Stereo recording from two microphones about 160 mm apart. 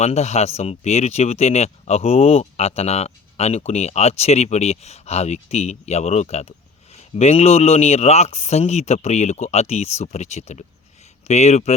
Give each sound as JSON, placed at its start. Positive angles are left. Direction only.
{"t": 0.0, "sound": "speech", "side_deg": 45}